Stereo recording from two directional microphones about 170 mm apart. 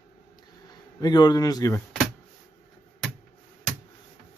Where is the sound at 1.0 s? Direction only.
25° left (ahead or behind).